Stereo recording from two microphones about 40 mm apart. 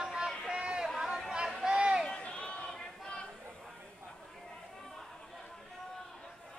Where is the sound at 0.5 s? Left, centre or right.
Right.